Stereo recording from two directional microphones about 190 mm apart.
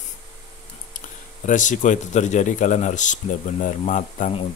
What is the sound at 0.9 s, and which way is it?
Speech, 40° left (ahead or behind).